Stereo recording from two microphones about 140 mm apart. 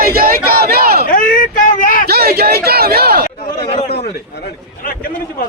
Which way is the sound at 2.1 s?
90° right.